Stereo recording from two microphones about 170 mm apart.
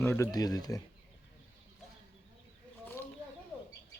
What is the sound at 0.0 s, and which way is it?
Speech, 15° left (ahead or behind).